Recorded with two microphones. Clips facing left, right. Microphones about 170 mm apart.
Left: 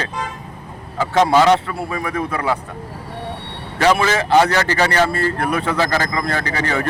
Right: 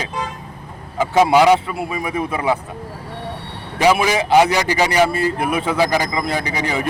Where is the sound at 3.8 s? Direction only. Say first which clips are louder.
Right 1 dB; 10° right (ahead or behind).